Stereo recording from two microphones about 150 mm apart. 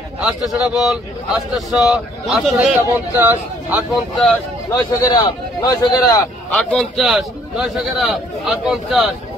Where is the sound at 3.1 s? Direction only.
15° right (ahead or behind).